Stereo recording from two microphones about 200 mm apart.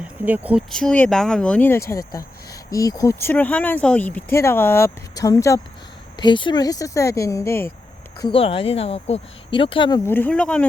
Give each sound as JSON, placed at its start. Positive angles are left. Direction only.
{"t": 0.3, "sound": "speech", "side_deg": -5}
{"t": 8.2, "sound": "speech", "side_deg": 30}
{"t": 10.1, "sound": "speech", "side_deg": 10}